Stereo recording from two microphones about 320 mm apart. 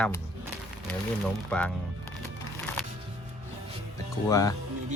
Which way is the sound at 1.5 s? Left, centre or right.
Centre.